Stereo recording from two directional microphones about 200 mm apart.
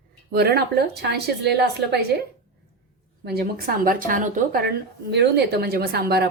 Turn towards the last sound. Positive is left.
turn(degrees=-55)  # may be behind; listen again after turning